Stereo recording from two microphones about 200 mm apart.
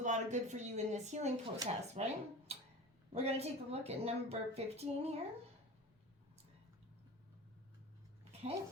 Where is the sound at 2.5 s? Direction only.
30° right (ahead or behind).